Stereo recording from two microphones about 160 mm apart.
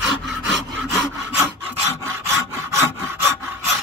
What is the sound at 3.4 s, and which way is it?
Sawing, 15° right (ahead or behind).